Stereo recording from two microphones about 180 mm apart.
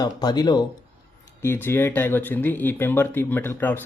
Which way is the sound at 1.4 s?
15° left (ahead or behind).